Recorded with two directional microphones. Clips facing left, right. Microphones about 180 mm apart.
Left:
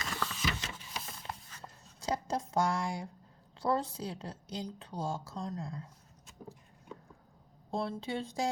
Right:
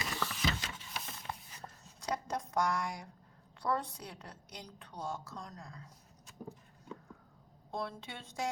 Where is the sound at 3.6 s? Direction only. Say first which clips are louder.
Left 4 dB; 25° left (ahead or behind).